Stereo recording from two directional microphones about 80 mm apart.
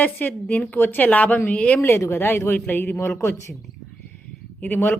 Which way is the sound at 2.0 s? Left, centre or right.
Left.